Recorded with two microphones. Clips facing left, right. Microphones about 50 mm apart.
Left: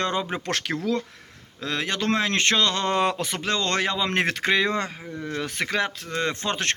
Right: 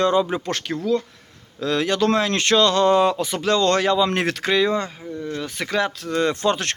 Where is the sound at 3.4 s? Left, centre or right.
Left.